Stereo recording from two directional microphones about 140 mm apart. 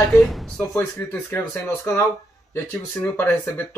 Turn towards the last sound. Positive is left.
turn(degrees=15)  # may be behind; listen again after turning